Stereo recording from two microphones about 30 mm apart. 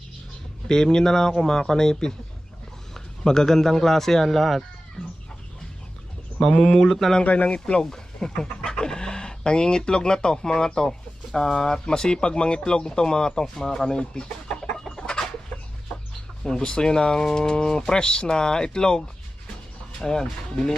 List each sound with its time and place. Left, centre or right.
0.7 s a man's voice: left
6.7 s speech: centre
7.3 s speech: left
7.9 s speech: centre
14.7 s chicken: left
16.4 s speech: left